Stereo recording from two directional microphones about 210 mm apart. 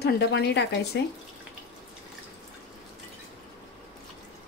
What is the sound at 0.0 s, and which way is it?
Speech, 50° left (ahead or behind).